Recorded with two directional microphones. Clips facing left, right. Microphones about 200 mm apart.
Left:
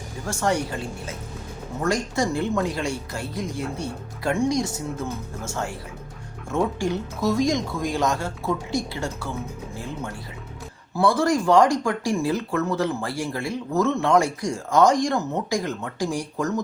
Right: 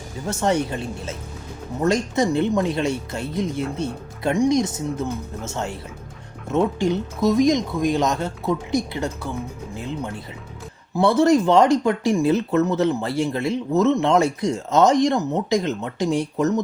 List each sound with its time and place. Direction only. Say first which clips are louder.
0.3 s speech: right 3 dB; 20° right (ahead or behind)